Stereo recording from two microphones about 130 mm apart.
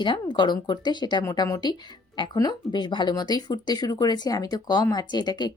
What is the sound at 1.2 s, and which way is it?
Speech, 25° left (ahead or behind).